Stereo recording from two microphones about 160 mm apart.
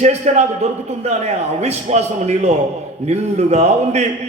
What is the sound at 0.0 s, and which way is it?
A man's voice, 45° right (ahead or behind).